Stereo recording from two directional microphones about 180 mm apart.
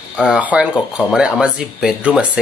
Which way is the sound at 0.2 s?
5° right (ahead or behind).